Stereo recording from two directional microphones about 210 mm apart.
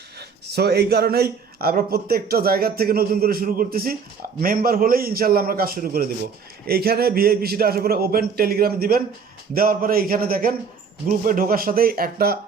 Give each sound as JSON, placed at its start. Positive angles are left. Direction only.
{"t": 0.2, "sound": "speech", "side_deg": -50}